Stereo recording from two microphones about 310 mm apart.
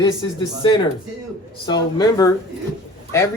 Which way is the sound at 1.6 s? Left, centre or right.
Centre.